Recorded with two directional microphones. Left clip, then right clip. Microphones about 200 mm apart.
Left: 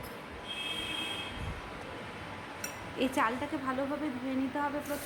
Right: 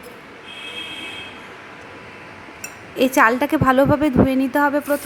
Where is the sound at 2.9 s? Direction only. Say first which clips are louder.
Right 16 dB; 30° right (ahead or behind).